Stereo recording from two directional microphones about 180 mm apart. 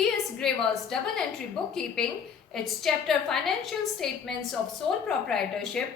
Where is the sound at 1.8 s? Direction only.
5° left (ahead or behind).